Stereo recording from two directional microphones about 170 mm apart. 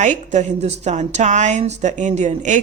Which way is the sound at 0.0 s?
45° right (ahead or behind).